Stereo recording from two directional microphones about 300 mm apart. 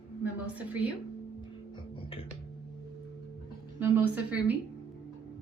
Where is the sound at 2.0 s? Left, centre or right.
Centre.